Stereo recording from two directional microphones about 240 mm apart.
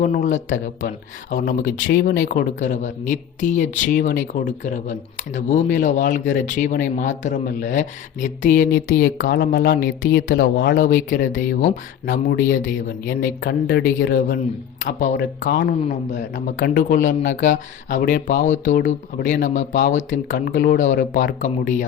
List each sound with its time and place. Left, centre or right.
0.0 s speech: left